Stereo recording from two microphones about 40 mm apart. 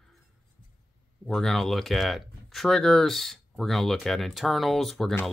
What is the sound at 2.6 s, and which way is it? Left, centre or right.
Speech, centre.